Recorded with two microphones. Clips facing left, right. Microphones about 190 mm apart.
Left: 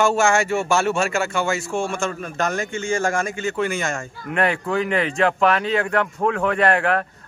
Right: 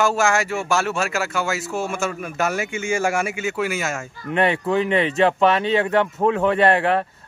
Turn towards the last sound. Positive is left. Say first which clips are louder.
# right 2 dB
turn(degrees=-25)  # may be behind; listen again after turning